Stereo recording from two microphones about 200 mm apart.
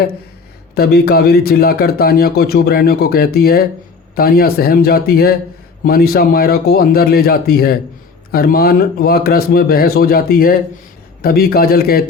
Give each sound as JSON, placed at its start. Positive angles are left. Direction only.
{"t": 0.8, "sound": "speech", "side_deg": 55}